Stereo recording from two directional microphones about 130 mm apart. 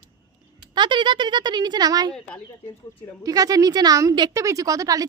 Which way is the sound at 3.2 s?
30° right (ahead or behind).